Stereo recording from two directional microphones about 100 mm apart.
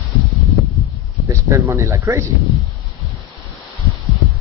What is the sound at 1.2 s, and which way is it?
Speech, 30° right (ahead or behind).